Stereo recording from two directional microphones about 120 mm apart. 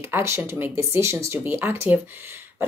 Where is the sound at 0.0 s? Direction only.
20° right (ahead or behind).